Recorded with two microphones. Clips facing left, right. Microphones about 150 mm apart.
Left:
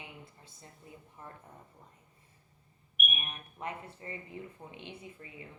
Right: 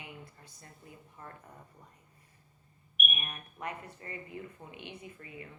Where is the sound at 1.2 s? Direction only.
25° left (ahead or behind).